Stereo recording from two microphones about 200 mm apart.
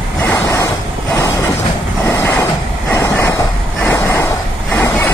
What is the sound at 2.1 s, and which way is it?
Vehicle, 15° left (ahead or behind).